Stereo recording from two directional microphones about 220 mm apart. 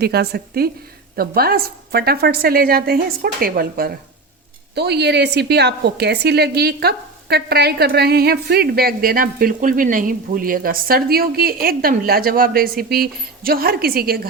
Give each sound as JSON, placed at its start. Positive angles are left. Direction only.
{"t": 0.0, "sound": "a woman's voice", "side_deg": -45}